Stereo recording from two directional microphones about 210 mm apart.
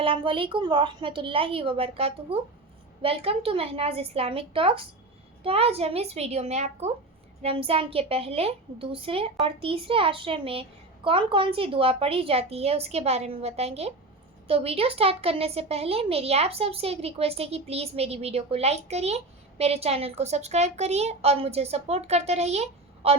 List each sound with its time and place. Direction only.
0.0 s speech: 25° right (ahead or behind)